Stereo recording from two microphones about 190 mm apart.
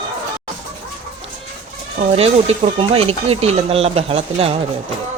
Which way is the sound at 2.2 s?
30° right (ahead or behind).